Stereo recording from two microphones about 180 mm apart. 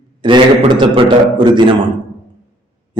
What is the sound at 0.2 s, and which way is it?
A man's voice, 25° right (ahead or behind).